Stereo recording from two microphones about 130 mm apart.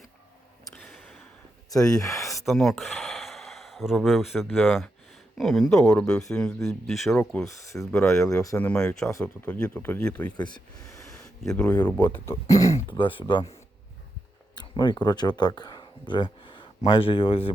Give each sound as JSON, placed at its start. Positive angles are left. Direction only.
{"t": 0.7, "sound": "a sound", "side_deg": 5}
{"t": 1.7, "sound": "speech", "side_deg": 25}
{"t": 2.4, "sound": "speech", "side_deg": 0}
{"t": 7.4, "sound": "speech", "side_deg": 25}
{"t": 7.9, "sound": "speech", "side_deg": 5}
{"t": 8.2, "sound": "speech", "side_deg": 25}
{"t": 8.5, "sound": "speech", "side_deg": 10}
{"t": 10.3, "sound": "speech", "side_deg": 35}
{"t": 11.4, "sound": "speech", "side_deg": 10}
{"t": 12.9, "sound": "speech", "side_deg": 40}
{"t": 14.5, "sound": "a sound", "side_deg": 35}
{"t": 15.0, "sound": "speech", "side_deg": 35}